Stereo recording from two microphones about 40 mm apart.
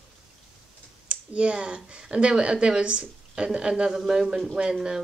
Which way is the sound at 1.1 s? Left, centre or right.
Right.